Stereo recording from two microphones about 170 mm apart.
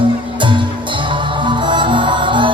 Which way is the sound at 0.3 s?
30° right (ahead or behind).